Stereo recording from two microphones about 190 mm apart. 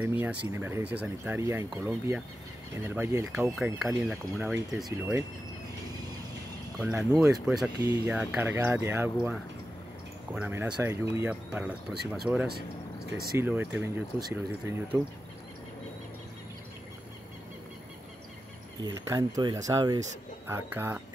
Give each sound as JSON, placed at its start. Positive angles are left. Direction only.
{"t": 0.0, "sound": "speech", "side_deg": -10}
{"t": 3.3, "sound": "speech", "side_deg": 0}
{"t": 6.8, "sound": "speech", "side_deg": -15}
{"t": 10.3, "sound": "speech", "side_deg": -10}
{"t": 18.8, "sound": "speech", "side_deg": -20}